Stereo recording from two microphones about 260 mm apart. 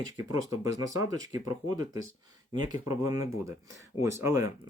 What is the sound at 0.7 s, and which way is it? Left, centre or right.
Speech, centre.